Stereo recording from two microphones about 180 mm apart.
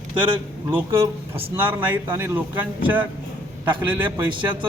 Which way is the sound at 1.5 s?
10° right (ahead or behind).